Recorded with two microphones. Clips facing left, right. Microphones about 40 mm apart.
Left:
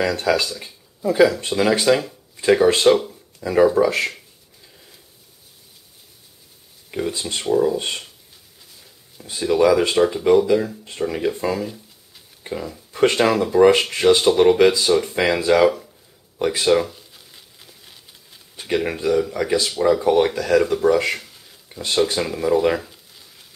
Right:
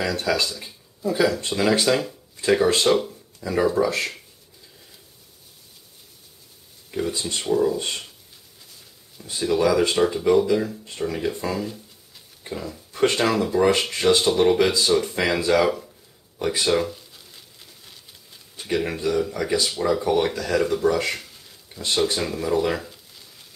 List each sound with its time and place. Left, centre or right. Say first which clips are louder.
0.0 s speech: left 4 dB; centre
1.0 s speech: left 6 dB; left
1.6 s speech: left 3 dB; centre
2.9 s a sound: left 4 dB; centre
3.4 s speech: left 5 dB; centre
7.0 s speech: left 1 dB; centre
9.2 s speech: left 4 dB; centre
16.3 s crumpling: left 4 dB; centre
19.8 s speech: left 6 dB; centre